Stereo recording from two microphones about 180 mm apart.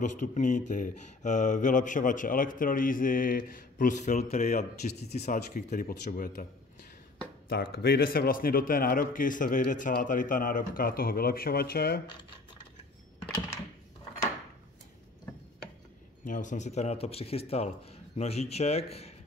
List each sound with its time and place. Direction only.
0.0 s speech: 45° left (ahead or behind)
7.4 s speech: 60° left (ahead or behind)
16.3 s speech: 45° left (ahead or behind)